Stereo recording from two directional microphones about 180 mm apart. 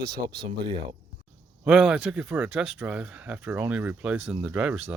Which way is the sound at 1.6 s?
5° right (ahead or behind).